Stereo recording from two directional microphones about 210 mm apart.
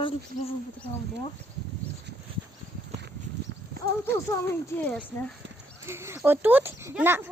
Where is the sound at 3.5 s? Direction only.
50° right (ahead or behind).